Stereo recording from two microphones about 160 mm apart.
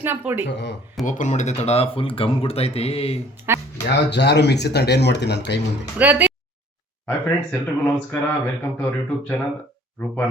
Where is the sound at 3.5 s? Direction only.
15° right (ahead or behind).